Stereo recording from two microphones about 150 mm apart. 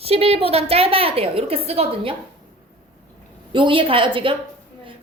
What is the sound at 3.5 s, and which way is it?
Speech, 35° right (ahead or behind).